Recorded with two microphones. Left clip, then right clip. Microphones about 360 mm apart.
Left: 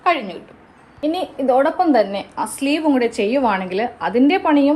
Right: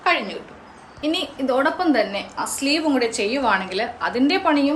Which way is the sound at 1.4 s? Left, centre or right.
Centre.